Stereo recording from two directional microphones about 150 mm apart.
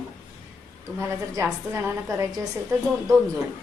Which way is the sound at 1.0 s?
15° right (ahead or behind).